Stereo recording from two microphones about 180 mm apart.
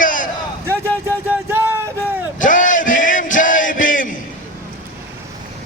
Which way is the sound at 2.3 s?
45° left (ahead or behind).